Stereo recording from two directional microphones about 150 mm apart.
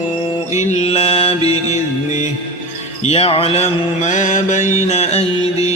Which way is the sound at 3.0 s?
40° left (ahead or behind).